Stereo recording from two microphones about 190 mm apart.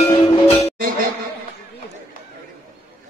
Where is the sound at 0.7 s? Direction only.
50° right (ahead or behind).